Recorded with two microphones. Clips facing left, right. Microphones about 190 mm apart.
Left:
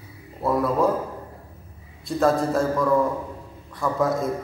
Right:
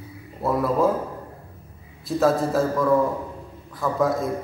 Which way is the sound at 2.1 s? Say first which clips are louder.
Even; centre (ahead or behind).